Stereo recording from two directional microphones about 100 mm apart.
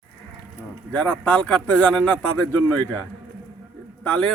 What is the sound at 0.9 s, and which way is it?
A man's voice, 15° left (ahead or behind).